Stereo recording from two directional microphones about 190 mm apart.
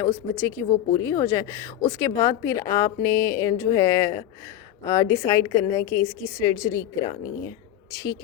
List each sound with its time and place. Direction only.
0.0 s a woman's voice: 15° left (ahead or behind)